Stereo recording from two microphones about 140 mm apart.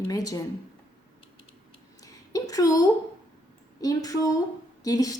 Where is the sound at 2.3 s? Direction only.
25° left (ahead or behind).